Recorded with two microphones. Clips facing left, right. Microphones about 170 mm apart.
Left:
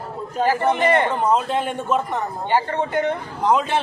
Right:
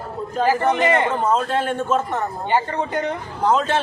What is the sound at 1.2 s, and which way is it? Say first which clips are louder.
Speech: even; 15° left (ahead or behind).